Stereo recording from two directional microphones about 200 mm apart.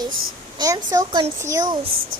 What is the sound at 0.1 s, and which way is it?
Speech, 90° right.